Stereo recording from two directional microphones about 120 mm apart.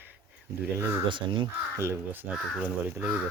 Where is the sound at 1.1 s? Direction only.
45° right (ahead or behind).